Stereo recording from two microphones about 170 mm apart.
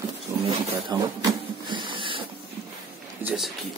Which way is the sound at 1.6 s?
30° right (ahead or behind).